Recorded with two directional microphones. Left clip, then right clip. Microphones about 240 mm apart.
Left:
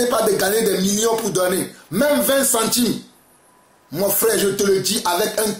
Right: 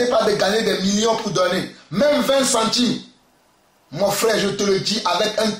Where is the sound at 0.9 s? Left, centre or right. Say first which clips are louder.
Even; left.